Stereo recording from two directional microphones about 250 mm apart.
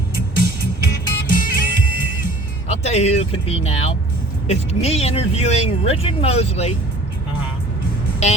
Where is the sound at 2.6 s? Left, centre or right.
Left.